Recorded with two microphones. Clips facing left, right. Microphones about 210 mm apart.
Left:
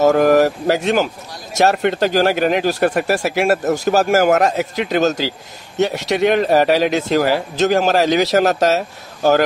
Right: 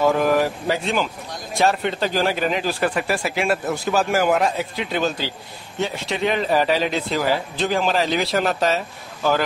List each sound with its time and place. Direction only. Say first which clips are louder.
0.0 s speech: left 6 dB; 45° left (ahead or behind)
0.7 s speech: left 6 dB; 75° left (ahead or behind); by 5.2 s 45° left (ahead or behind)
5.8 s speech: left 7 dB; 75° left (ahead or behind)
7.5 s speech: left 6 dB; 45° left (ahead or behind)